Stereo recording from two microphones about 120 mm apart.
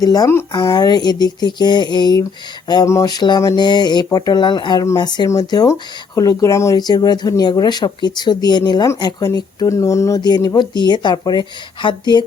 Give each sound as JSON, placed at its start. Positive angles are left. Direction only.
{"t": 0.0, "sound": "speech", "side_deg": 30}
{"t": 2.6, "sound": "a sound", "side_deg": 35}
{"t": 2.9, "sound": "speech", "side_deg": 30}
{"t": 10.2, "sound": "speech", "side_deg": 35}